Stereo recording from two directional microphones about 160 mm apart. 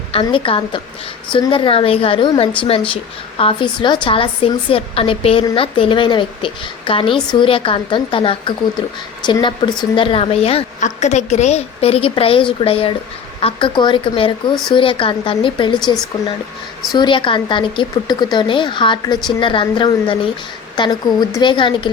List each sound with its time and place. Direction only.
0.1 s speech: 35° left (ahead or behind)
16.9 s a woman's voice: 30° left (ahead or behind)